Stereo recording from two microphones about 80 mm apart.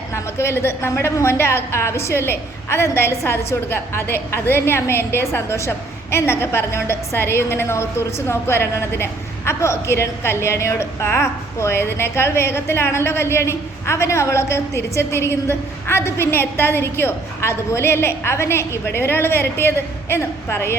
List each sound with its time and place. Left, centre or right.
0.1 s speech: left